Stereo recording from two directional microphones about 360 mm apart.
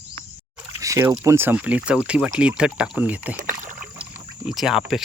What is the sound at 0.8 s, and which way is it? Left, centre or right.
Speech, centre.